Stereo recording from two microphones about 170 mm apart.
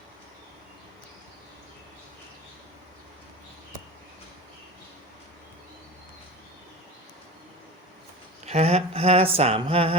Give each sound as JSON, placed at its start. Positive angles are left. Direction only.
{"t": 8.4, "sound": "speech", "side_deg": -40}